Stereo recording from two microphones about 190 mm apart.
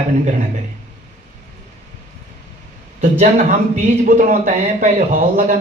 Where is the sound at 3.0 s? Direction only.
35° right (ahead or behind).